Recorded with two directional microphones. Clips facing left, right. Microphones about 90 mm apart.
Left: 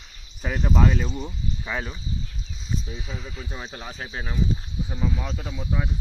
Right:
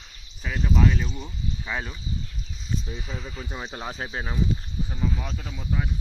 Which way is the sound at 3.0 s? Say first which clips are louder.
Even; centre (ahead or behind).